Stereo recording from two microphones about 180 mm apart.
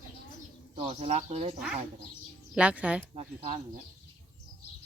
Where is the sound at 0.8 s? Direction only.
35° right (ahead or behind).